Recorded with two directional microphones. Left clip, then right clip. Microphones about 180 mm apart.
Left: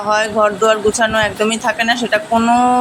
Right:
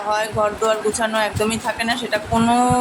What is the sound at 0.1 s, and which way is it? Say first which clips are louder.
Speech: left 6 dB; 20° left (ahead or behind).